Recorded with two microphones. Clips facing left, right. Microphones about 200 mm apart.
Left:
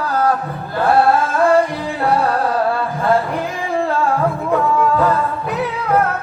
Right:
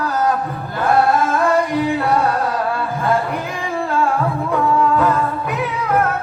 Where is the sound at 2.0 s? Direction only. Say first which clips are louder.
Left 1 dB; 30° left (ahead or behind).